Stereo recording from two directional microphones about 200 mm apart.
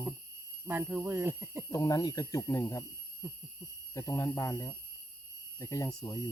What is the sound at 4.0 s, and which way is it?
Speech, 15° left (ahead or behind).